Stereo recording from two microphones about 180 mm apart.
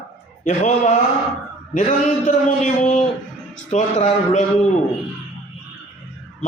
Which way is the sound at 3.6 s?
40° left (ahead or behind).